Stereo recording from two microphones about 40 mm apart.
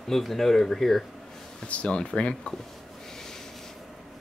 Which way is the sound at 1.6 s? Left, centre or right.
Left.